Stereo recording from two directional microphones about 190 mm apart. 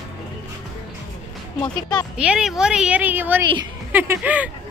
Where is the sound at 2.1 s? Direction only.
5° right (ahead or behind).